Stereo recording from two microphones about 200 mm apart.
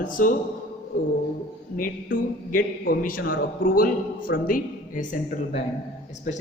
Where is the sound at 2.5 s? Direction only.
45° left (ahead or behind).